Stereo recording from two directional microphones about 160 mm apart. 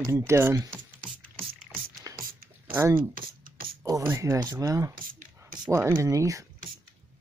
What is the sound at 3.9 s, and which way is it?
Speech, 20° right (ahead or behind).